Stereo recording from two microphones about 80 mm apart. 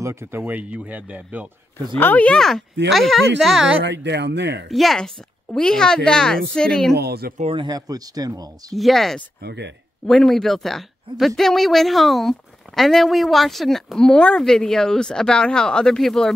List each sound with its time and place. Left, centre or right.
0.0 s speech: right
0.5 s speech: centre
2.0 s speech: left
2.2 s speech: centre
4.6 s a woman's voice: centre
7.5 s speech: right
8.7 s speech: centre